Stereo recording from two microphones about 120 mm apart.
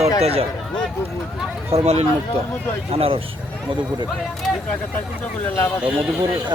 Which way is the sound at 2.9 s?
55° right (ahead or behind).